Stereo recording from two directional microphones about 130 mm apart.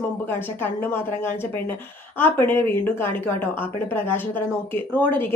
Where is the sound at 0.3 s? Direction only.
15° left (ahead or behind).